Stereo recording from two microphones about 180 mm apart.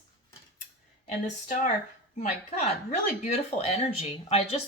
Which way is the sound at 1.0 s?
45° left (ahead or behind).